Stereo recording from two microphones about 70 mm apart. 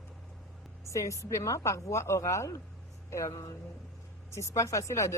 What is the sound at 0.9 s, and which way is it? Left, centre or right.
Speech, left.